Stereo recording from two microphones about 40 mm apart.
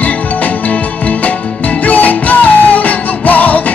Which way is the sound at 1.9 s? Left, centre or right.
Left.